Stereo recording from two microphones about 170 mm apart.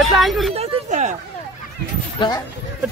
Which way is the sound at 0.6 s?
45° right (ahead or behind).